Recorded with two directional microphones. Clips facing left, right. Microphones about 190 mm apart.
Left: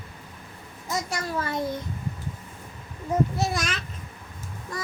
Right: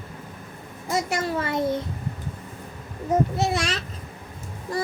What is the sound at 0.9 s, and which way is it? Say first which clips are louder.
Speech: right 4 dB; 25° right (ahead or behind).